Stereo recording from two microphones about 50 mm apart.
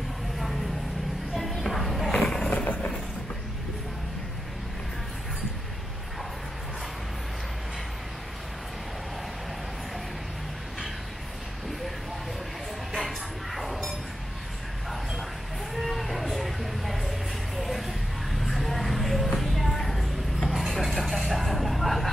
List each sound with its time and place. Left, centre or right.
1.3 s music: centre
2.5 s vehicle: left
12.9 s music: centre
15.7 s a sound: centre
17.6 s music: centre
18.4 s a sound: centre